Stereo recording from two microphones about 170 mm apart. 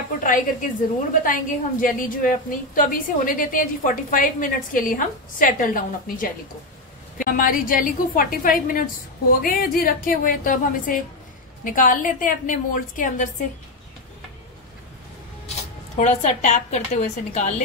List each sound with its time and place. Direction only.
0.2 s a woman's voice: 50° left (ahead or behind)
16.0 s a woman's voice: 45° left (ahead or behind)